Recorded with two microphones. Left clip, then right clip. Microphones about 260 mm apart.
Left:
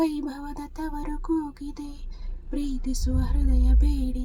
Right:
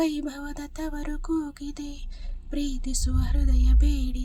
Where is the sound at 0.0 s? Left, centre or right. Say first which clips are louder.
Left 1 dB; right.